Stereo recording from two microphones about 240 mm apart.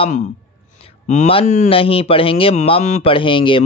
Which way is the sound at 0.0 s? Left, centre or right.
Left.